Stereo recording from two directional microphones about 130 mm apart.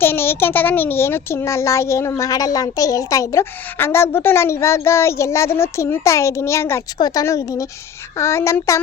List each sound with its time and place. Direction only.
0.0 s a child's voice: 15° left (ahead or behind)